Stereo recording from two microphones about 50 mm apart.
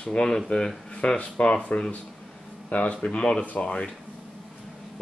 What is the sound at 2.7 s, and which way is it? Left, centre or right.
Speech, left.